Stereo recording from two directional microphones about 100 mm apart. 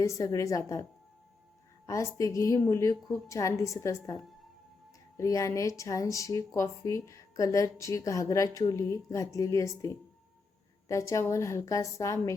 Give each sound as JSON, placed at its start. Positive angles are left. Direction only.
{"t": 0.0, "sound": "speech", "side_deg": 35}
{"t": 1.9, "sound": "speech", "side_deg": 35}